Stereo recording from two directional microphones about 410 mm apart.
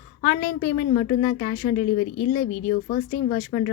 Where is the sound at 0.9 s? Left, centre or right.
Centre.